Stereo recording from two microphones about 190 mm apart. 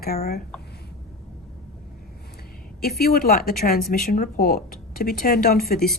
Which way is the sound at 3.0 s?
55° left (ahead or behind).